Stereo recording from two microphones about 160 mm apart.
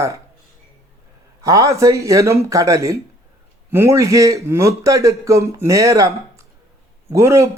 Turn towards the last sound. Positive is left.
turn(degrees=-20)  # may be behind; listen again after turning